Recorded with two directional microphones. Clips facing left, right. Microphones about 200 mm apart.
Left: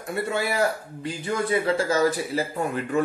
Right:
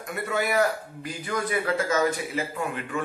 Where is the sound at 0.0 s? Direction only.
30° left (ahead or behind).